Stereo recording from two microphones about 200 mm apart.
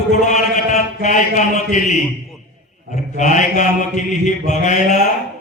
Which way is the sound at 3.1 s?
40° left (ahead or behind).